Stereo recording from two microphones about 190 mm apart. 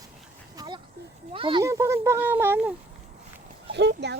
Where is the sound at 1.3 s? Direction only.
25° right (ahead or behind).